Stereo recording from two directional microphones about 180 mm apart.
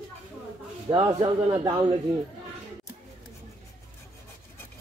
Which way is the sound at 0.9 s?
25° right (ahead or behind).